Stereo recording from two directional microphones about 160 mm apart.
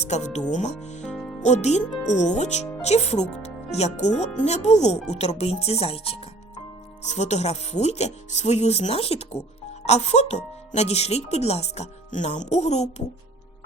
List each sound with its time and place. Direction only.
0.0 s speech: 45° left (ahead or behind)
1.0 s speech: centre (ahead or behind)
1.4 s speech: 45° left (ahead or behind)